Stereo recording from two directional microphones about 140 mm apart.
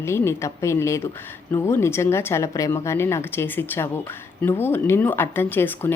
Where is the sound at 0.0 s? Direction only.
20° left (ahead or behind).